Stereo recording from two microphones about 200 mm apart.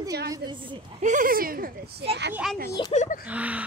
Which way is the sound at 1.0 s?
40° right (ahead or behind).